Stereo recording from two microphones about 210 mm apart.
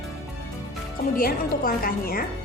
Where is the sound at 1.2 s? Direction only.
45° left (ahead or behind).